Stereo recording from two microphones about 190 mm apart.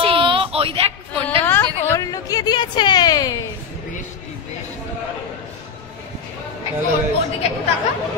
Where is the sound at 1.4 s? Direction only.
10° left (ahead or behind).